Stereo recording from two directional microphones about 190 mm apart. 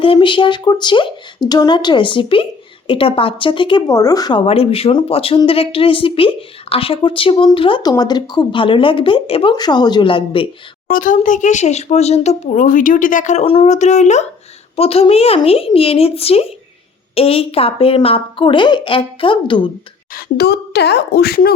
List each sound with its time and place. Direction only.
0.0 s a woman's voice: 25° left (ahead or behind)
10.8 s a woman's voice: 45° left (ahead or behind); by 19.7 s 25° left (ahead or behind)
20.1 s a woman's voice: 55° left (ahead or behind)